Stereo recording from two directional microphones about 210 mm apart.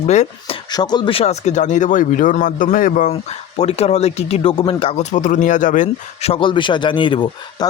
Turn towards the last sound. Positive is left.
turn(degrees=25)  # may be behind; listen again after turning